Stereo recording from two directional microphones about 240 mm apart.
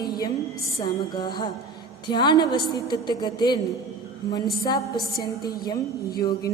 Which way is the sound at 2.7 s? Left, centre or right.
Centre.